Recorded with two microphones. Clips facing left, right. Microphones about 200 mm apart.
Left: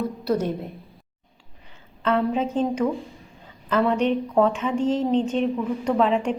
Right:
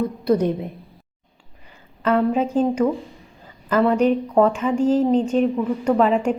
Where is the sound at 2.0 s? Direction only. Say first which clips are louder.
Right 3 dB; 5° right (ahead or behind).